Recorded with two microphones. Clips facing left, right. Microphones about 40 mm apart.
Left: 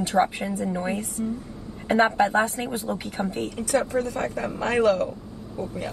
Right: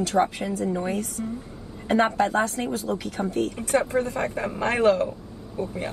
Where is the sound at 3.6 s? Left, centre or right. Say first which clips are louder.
Left 1 dB; right.